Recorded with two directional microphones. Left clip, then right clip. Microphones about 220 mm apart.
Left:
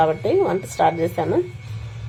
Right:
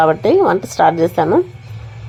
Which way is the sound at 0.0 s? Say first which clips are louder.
Right 6 dB; 25° right (ahead or behind).